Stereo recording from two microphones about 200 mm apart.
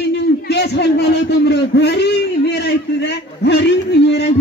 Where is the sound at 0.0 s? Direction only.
55° left (ahead or behind).